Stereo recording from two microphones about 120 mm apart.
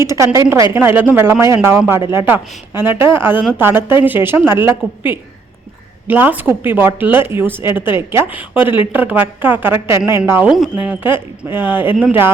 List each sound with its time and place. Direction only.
0.0 s speech: 25° right (ahead or behind)
10.5 s speech: 5° right (ahead or behind)
10.8 s speech: 20° right (ahead or behind)